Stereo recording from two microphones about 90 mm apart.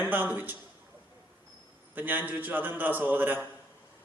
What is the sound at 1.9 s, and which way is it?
A man's voice, 20° right (ahead or behind).